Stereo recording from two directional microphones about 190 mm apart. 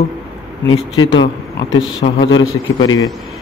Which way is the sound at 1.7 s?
90° left.